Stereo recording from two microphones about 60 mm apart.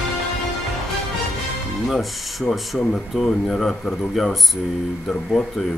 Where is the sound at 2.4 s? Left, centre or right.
Centre.